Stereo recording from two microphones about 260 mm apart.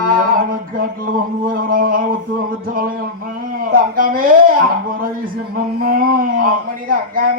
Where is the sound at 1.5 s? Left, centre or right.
Right.